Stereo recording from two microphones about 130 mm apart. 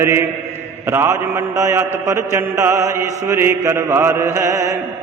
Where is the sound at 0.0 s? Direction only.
20° right (ahead or behind).